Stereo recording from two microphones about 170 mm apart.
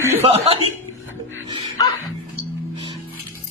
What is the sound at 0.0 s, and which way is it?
Chuckle, 15° right (ahead or behind).